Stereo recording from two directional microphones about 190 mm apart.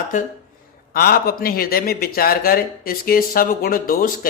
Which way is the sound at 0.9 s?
55° left (ahead or behind).